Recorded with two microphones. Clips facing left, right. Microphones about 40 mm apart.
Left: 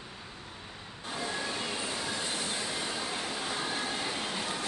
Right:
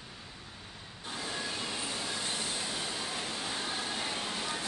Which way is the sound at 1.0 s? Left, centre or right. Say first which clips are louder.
Left 3 dB; centre.